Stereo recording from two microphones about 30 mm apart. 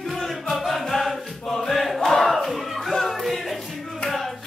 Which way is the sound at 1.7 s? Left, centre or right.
Centre.